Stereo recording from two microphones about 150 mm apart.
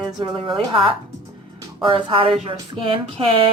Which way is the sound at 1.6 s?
35° right (ahead or behind).